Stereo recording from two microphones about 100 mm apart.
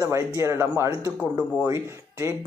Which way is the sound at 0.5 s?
20° right (ahead or behind).